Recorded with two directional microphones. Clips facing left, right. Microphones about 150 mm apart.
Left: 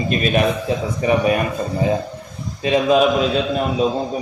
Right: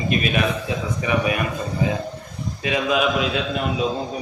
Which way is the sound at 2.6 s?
35° left (ahead or behind).